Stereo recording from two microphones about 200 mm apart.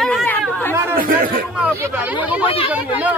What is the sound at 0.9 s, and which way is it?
Speech, 45° right (ahead or behind).